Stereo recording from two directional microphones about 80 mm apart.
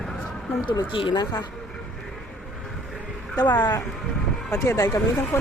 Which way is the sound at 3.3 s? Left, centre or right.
Left.